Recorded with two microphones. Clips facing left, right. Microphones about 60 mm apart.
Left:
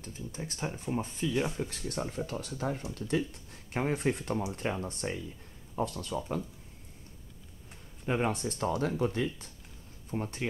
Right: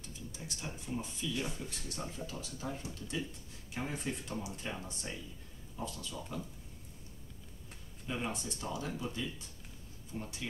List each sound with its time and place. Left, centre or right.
0.0 s speech: left
8.0 s speech: left
10.1 s speech: left